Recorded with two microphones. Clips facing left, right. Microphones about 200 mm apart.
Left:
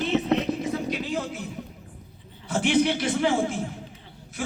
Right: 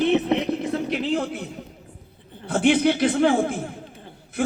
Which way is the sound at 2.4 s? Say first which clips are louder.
Right 3 dB; 60° right (ahead or behind).